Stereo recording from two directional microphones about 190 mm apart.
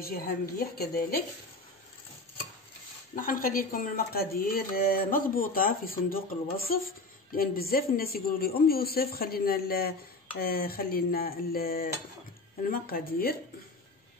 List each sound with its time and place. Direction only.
0.0 s speech: 50° left (ahead or behind)
3.2 s speech: 50° left (ahead or behind)